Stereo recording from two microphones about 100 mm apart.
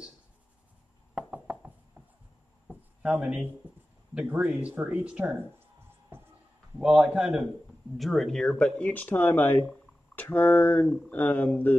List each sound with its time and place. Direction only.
1.1 s knock: 15° right (ahead or behind)
2.7 s a sound: 15° right (ahead or behind)
4.1 s speech: 15° right (ahead or behind)
6.1 s music: 25° right (ahead or behind)
6.8 s speech: 10° right (ahead or behind)
8.0 s speech: centre (ahead or behind); by 11.7 s 15° left (ahead or behind)